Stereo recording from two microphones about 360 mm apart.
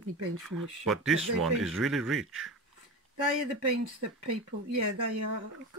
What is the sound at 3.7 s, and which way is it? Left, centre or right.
Speech, right.